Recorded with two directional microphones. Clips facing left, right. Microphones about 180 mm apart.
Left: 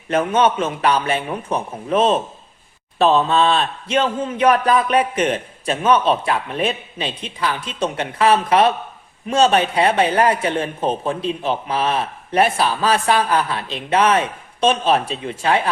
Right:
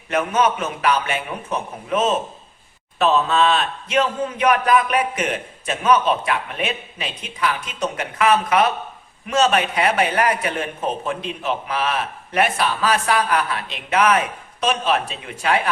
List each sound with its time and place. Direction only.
0.1 s speech: 30° left (ahead or behind)